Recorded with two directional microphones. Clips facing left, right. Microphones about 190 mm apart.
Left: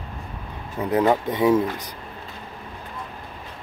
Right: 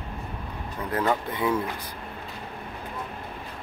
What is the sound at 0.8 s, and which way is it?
Speech, 15° left (ahead or behind).